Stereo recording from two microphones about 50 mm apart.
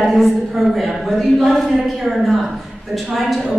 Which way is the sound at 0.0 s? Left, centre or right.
Centre.